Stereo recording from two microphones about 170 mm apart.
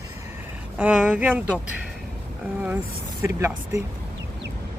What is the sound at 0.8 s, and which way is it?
Speech, 10° right (ahead or behind).